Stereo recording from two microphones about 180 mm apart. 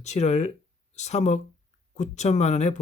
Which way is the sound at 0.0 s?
40° left (ahead or behind).